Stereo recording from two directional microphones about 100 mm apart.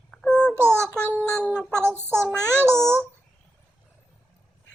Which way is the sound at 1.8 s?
25° right (ahead or behind).